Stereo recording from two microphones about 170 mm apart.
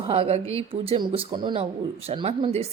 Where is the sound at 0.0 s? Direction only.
35° right (ahead or behind).